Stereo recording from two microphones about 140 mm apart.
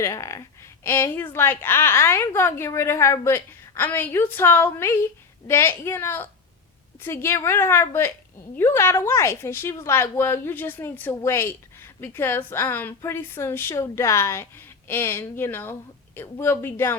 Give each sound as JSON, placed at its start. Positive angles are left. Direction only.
{"t": 0.0, "sound": "a woman's voice", "side_deg": 20}